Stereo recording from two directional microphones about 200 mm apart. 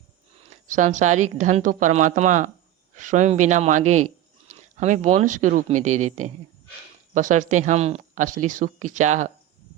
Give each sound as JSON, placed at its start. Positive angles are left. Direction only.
{"t": 0.7, "sound": "speech", "side_deg": -40}